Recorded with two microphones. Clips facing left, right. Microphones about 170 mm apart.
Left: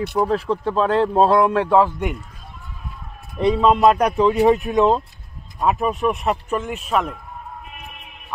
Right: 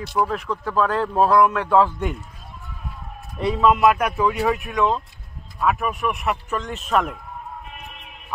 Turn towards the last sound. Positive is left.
turn(degrees=0)  # may be behind; listen again after turning